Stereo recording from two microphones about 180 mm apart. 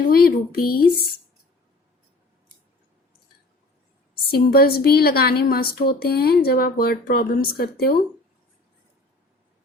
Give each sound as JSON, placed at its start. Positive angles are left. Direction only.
{"t": 0.1, "sound": "speech", "side_deg": 55}
{"t": 4.3, "sound": "speech", "side_deg": 60}